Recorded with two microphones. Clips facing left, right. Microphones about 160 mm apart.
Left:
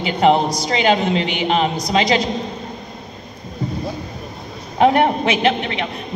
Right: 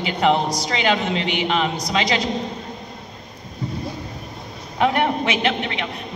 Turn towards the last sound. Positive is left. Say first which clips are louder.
# left 4 dB
turn(degrees=35)  # may be behind; listen again after turning